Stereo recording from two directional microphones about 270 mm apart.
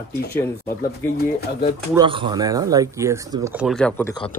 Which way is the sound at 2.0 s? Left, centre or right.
Centre.